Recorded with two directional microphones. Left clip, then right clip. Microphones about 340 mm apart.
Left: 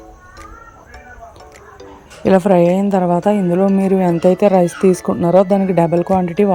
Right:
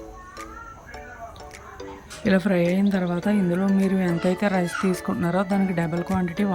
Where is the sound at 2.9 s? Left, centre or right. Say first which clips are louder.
Left 12 dB; left.